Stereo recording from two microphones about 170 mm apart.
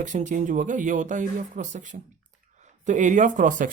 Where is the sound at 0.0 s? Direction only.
45° right (ahead or behind).